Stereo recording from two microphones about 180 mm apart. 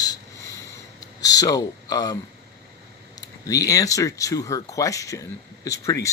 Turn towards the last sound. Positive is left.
turn(degrees=15)  # may be behind; listen again after turning